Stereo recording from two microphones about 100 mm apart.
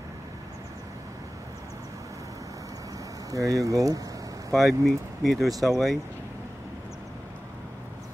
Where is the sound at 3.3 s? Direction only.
35° right (ahead or behind).